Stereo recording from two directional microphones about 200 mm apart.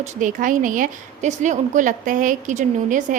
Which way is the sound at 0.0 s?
40° right (ahead or behind).